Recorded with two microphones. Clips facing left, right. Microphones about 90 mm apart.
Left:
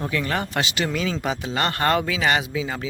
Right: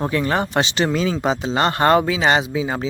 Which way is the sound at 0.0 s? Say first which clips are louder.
Right 5 dB; 30° right (ahead or behind).